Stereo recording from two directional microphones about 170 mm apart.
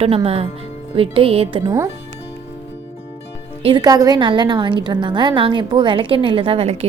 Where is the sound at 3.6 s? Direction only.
25° right (ahead or behind).